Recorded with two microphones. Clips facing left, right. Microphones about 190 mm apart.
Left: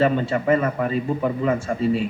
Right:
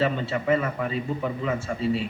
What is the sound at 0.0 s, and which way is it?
A man's voice, 50° left (ahead or behind).